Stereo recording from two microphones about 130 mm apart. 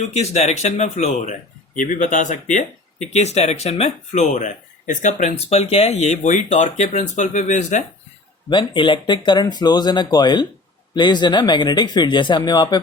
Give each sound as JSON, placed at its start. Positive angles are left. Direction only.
{"t": 0.1, "sound": "speech", "side_deg": 55}
{"t": 8.4, "sound": "speech", "side_deg": 40}